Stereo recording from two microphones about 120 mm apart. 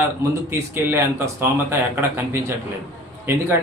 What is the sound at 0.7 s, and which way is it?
A man's voice, 20° right (ahead or behind).